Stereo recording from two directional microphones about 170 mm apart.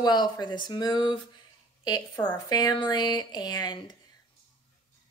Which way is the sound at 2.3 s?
25° left (ahead or behind).